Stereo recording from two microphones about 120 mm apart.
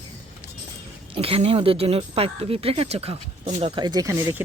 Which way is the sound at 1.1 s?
55° right (ahead or behind).